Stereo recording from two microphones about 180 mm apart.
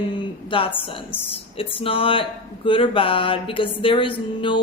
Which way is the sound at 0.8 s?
30° left (ahead or behind).